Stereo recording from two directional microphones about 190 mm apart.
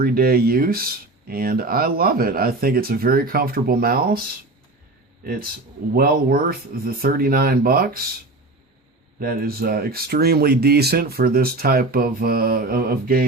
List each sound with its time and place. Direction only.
0.0 s speech: 50° right (ahead or behind)
5.2 s speech: 50° right (ahead or behind)
9.1 s speech: 50° right (ahead or behind)